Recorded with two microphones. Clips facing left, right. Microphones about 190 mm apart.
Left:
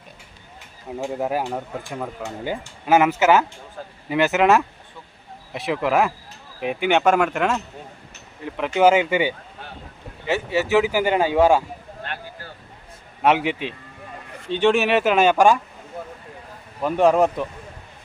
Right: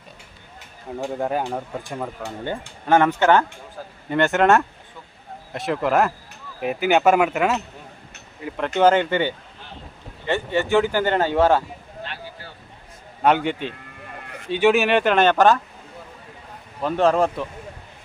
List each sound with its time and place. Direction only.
0.9 s speech: centre (ahead or behind)
2.4 s speech: 10° left (ahead or behind)
12.0 s a sound: 50° left (ahead or behind)
13.2 s speech: centre (ahead or behind)
16.8 s speech: 15° left (ahead or behind)